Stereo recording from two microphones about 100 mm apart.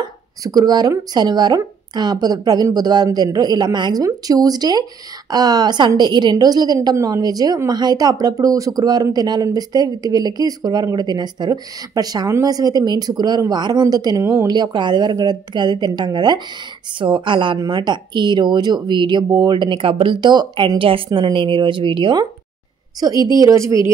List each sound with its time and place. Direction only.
0.0 s a woman's voice: 40° right (ahead or behind)
14.5 s a woman's voice: 45° right (ahead or behind); by 23.8 s 30° right (ahead or behind)